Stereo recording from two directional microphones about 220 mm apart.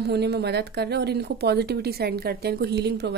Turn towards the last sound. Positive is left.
turn(degrees=-50)  # may be behind; listen again after turning